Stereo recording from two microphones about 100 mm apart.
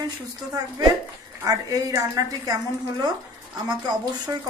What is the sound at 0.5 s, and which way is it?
Speech, 40° right (ahead or behind).